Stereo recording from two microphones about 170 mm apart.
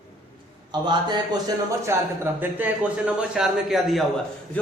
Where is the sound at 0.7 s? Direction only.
25° right (ahead or behind).